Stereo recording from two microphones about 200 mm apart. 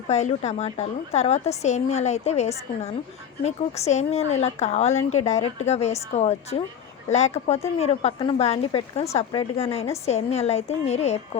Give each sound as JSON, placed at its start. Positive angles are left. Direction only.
{"t": 0.1, "sound": "speech", "side_deg": 35}